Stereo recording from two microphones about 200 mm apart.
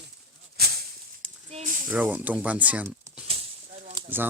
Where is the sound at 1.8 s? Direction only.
5° right (ahead or behind).